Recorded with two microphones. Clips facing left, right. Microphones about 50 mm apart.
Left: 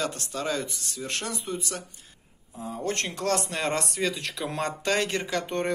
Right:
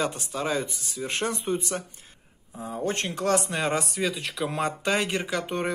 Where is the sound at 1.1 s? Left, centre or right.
Right.